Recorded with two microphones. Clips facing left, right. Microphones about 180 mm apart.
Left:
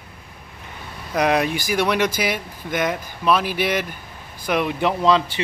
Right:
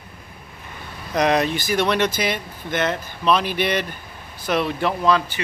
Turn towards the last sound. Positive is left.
turn(degrees=20)  # may be behind; listen again after turning